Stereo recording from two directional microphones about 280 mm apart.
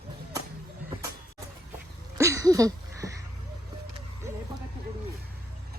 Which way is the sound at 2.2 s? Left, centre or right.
Centre.